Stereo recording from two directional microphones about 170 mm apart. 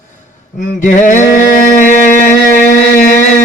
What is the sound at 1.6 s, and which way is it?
Music, 50° left (ahead or behind).